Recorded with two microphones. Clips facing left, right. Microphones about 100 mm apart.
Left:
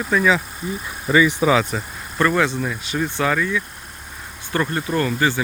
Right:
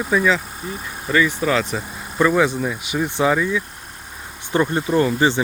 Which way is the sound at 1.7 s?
10° right (ahead or behind).